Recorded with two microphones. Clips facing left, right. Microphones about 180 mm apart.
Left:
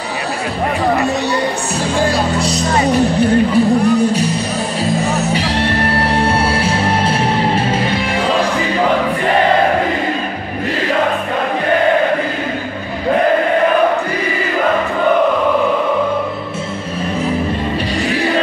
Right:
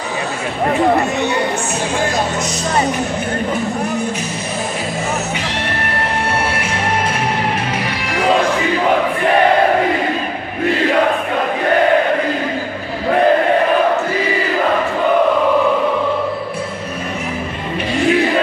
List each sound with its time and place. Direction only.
2.0 s music: 35° left (ahead or behind)
5.3 s music: 30° left (ahead or behind)